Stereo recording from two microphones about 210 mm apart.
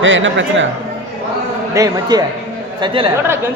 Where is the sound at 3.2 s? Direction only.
10° right (ahead or behind).